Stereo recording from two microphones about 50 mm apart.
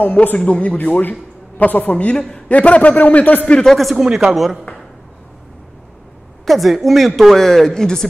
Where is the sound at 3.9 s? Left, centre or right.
Centre.